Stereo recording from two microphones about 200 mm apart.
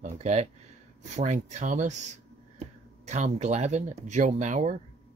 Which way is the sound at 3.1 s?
35° right (ahead or behind).